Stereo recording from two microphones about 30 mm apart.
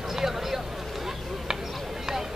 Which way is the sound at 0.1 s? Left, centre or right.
Centre.